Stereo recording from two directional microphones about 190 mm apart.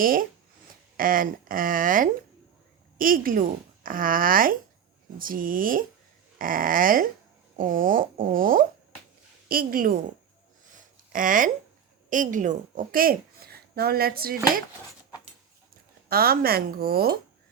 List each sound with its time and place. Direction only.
0.0 s speech: 50° right (ahead or behind)
10.7 s a sound: 45° right (ahead or behind)
12.1 s speech: 45° right (ahead or behind)
16.0 s speech: 50° right (ahead or behind)